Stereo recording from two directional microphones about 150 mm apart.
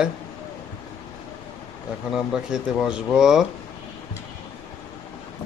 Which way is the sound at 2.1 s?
5° right (ahead or behind).